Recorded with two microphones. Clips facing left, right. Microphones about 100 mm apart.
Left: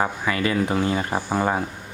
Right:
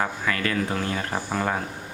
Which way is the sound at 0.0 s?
15° left (ahead or behind).